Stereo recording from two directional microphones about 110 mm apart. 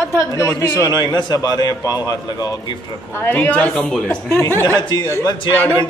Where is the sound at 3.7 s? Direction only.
5° left (ahead or behind).